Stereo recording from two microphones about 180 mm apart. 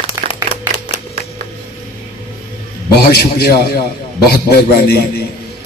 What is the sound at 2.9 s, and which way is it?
A man's voice, 60° left (ahead or behind).